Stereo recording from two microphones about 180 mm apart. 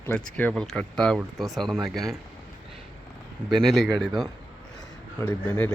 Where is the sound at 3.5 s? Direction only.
Centre (ahead or behind).